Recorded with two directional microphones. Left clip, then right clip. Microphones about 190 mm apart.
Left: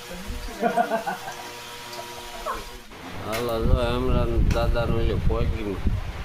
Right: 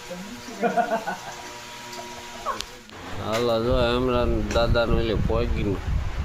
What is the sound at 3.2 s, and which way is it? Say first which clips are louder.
Speech: right 4 dB; 30° right (ahead or behind).